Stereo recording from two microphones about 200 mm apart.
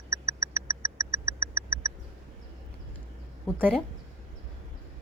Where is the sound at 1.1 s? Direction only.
15° right (ahead or behind).